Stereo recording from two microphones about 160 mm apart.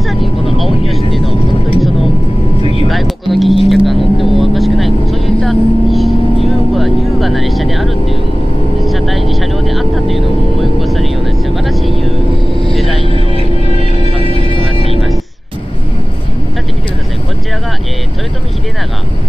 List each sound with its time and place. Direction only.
0.1 s vehicle: centre (ahead or behind)
14.1 s music: 35° right (ahead or behind)
14.4 s music: 35° left (ahead or behind)